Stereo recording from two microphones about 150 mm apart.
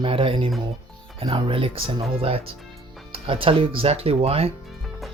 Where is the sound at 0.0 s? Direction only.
35° right (ahead or behind).